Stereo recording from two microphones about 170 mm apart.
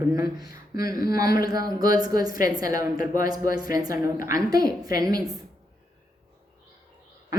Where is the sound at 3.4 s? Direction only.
55° left (ahead or behind).